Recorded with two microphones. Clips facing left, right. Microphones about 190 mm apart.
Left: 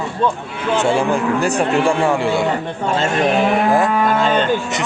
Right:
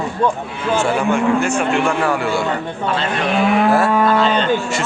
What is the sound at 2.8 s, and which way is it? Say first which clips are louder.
Speech: left 3 dB; 45° left (ahead or behind).